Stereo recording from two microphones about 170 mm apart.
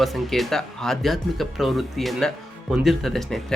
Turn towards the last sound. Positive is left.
turn(degrees=0)  # may be behind; listen again after turning